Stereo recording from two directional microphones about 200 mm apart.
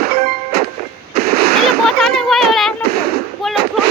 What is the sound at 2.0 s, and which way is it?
Child singing, centre (ahead or behind).